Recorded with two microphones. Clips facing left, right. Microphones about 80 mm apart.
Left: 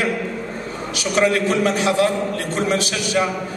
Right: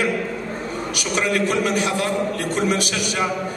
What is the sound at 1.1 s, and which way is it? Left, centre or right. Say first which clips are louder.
A man's voice: left 3 dB; left.